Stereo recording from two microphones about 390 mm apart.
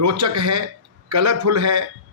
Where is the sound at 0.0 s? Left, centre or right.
Right.